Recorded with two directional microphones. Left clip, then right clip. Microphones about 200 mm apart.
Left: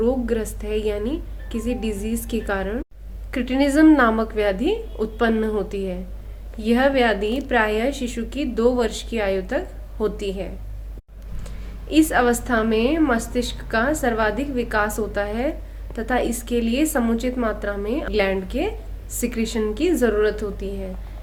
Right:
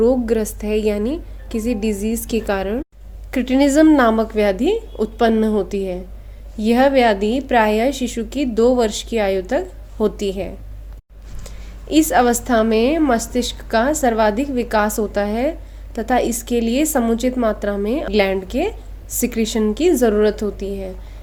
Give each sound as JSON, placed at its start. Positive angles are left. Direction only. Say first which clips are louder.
{"t": 0.0, "sound": "a woman's voice", "louder": "right 6 dB", "side_deg": -45}